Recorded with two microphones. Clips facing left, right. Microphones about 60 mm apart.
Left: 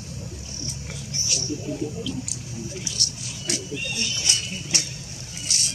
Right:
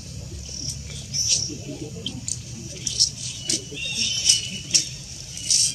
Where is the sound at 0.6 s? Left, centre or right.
Left.